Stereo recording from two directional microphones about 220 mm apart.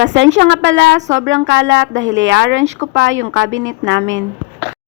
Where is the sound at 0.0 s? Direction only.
55° right (ahead or behind).